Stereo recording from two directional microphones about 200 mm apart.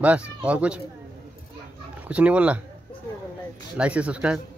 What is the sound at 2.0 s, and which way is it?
Speech, 5° right (ahead or behind).